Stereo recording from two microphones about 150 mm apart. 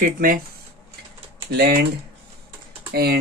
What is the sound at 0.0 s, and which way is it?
Speech, 70° right (ahead or behind).